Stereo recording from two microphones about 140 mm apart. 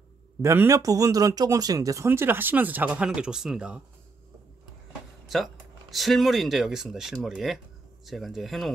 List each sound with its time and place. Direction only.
0.4 s speech: 20° right (ahead or behind)
5.2 s speech: centre (ahead or behind)